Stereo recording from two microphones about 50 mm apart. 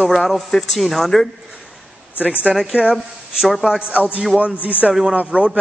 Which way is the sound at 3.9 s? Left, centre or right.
Right.